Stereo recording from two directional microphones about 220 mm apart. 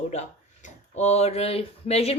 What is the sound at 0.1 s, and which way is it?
Speech, 30° left (ahead or behind).